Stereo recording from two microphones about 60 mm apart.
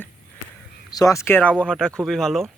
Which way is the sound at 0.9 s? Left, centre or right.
Left.